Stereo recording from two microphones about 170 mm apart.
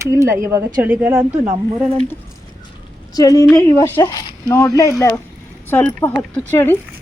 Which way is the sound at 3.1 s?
20° left (ahead or behind).